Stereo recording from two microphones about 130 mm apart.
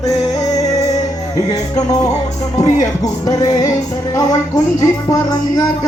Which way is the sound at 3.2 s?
30° left (ahead or behind).